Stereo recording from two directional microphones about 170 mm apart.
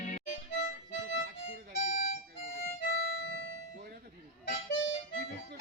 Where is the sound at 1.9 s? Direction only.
45° left (ahead or behind).